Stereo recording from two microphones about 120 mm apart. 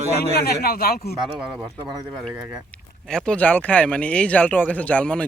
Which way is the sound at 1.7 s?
35° right (ahead or behind).